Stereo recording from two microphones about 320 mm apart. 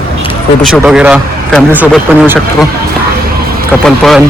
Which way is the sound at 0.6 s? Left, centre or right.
Centre.